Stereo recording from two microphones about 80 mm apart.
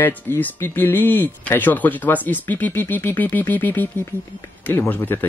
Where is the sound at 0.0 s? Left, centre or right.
Left.